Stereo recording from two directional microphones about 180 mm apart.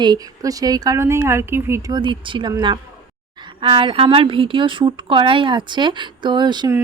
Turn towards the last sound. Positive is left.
turn(degrees=-25)  # may be behind; listen again after turning